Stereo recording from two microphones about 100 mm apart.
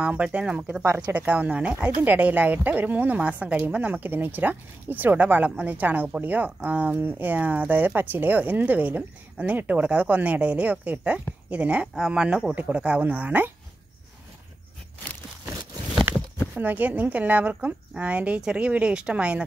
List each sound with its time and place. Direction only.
0.0 s speech: 15° right (ahead or behind)
16.1 s speech: 20° right (ahead or behind)